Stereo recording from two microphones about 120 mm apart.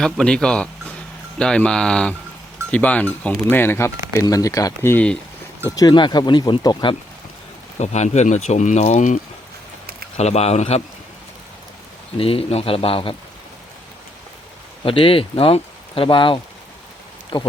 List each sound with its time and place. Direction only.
0.0 s speech: 5° left (ahead or behind)
5.7 s speech: 35° left (ahead or behind)
7.8 s speech: 70° left (ahead or behind); by 9.2 s 90° left
10.2 s speech: 65° left (ahead or behind)
12.1 s speech: 50° left (ahead or behind)
14.8 s speech: 50° left (ahead or behind)